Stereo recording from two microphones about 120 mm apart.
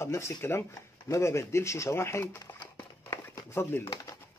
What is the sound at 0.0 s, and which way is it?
Speech, 20° left (ahead or behind).